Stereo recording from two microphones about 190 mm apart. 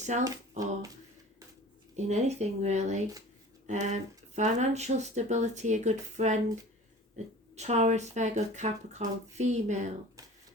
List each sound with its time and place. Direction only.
0.0 s speech: 40° right (ahead or behind)
2.0 s speech: 35° right (ahead or behind)
7.5 s speech: 35° right (ahead or behind)